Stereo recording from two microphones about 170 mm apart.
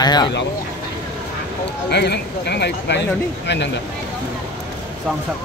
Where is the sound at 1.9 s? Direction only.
75° left (ahead or behind).